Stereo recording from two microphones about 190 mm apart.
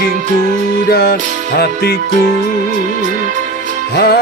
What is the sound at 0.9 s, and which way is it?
Music, 55° left (ahead or behind).